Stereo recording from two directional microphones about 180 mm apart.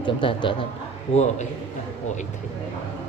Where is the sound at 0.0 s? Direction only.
25° left (ahead or behind).